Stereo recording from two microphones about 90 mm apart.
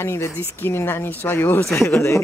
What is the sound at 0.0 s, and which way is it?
Speech, 30° left (ahead or behind).